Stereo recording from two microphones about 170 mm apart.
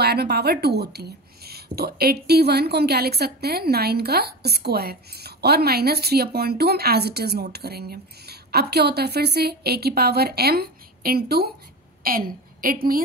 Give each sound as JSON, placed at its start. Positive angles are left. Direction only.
{"t": 0.0, "sound": "a woman's voice", "side_deg": -70}